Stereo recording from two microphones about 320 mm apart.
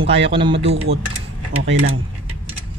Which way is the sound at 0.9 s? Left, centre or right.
Right.